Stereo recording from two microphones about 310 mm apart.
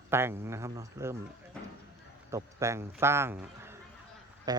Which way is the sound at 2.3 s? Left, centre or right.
Centre.